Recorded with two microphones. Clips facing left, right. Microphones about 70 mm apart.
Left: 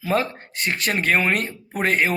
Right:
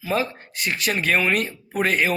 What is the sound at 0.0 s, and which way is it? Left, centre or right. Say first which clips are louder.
Speech: left 2 dB; left.